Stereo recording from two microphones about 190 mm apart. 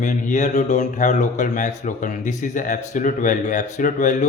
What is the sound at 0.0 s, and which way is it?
Speech, 40° left (ahead or behind).